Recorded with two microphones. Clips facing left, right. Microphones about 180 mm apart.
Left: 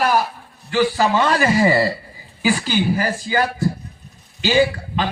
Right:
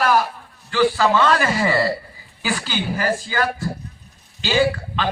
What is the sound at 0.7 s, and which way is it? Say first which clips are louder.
A man's voice: even; 15° left (ahead or behind).